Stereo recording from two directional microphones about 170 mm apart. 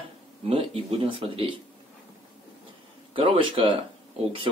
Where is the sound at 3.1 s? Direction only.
30° right (ahead or behind).